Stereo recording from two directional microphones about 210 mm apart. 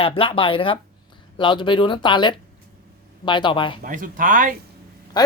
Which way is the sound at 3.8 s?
40° right (ahead or behind).